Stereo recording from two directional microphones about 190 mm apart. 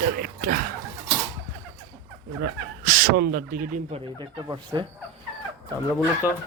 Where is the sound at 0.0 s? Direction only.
50° right (ahead or behind).